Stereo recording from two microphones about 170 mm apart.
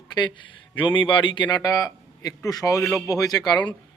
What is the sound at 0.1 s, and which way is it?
Speech, 25° left (ahead or behind).